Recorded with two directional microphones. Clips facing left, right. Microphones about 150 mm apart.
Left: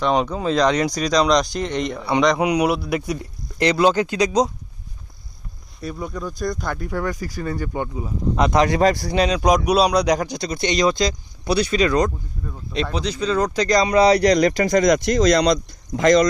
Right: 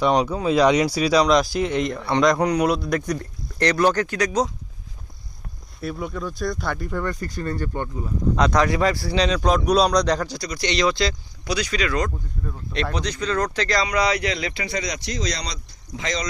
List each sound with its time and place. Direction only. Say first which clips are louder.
0.1 s speech: even; centre (ahead or behind)
5.8 s speech: even; centre (ahead or behind)
9.0 s speech: left 2 dB; 45° left (ahead or behind)
9.3 s speech: left 1 dB; 10° left (ahead or behind); by 12.0 s 35° left (ahead or behind)
12.5 s speech: left 2 dB; 5° left (ahead or behind); by 16.2 s 50° left (ahead or behind)